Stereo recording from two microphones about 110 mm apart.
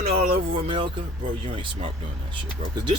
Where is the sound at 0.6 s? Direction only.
55° right (ahead or behind).